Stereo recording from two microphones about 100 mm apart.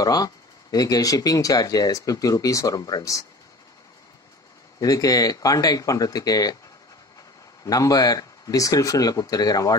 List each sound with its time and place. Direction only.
0.0 s speech: 40° left (ahead or behind)
4.7 s speech: 35° left (ahead or behind)
7.6 s speech: 35° left (ahead or behind)